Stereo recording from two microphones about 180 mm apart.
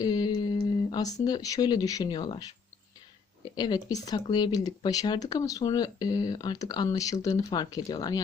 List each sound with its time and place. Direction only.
0.0 s speech: 20° left (ahead or behind)
3.5 s speech: 20° left (ahead or behind)